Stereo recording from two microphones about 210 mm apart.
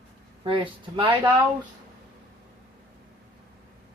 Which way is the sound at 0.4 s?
25° right (ahead or behind).